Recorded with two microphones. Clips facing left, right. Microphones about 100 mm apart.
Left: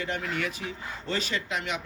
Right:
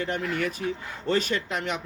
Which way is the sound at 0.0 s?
45° right (ahead or behind).